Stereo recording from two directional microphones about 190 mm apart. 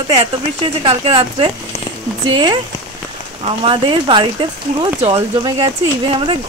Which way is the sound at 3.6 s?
25° right (ahead or behind).